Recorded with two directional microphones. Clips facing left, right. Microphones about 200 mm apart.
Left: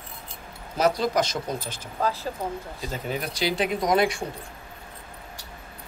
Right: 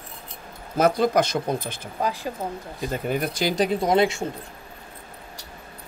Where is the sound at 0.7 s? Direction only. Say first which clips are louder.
Right 3 dB; 50° right (ahead or behind).